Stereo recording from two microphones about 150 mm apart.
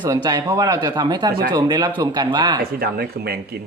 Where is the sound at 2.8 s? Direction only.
90° right.